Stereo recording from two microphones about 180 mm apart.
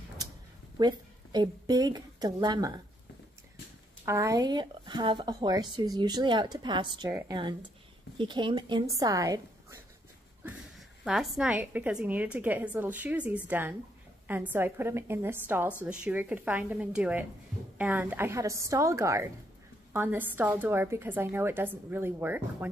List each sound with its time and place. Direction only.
0.2 s a sound: 20° right (ahead or behind)
0.7 s a woman's voice: 25° right (ahead or behind)
4.0 s a woman's voice: 15° right (ahead or behind)
11.1 s a woman's voice: centre (ahead or behind)